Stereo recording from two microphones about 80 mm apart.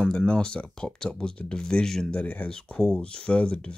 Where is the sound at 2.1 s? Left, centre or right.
Centre.